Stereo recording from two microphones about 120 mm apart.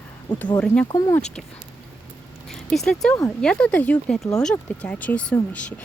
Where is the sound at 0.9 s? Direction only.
30° left (ahead or behind).